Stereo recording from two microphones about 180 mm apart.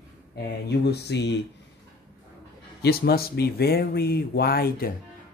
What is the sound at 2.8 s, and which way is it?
Speech, 60° left (ahead or behind).